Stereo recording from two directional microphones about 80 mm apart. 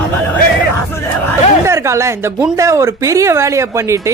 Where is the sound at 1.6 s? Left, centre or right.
Right.